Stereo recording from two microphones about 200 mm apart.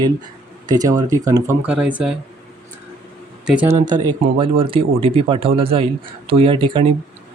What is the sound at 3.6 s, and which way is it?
Speech, 20° right (ahead or behind).